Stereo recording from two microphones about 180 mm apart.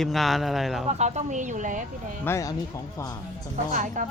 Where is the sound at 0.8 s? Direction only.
40° right (ahead or behind).